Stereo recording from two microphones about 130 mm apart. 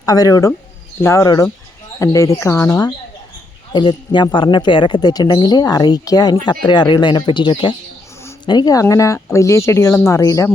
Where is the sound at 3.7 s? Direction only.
35° left (ahead or behind).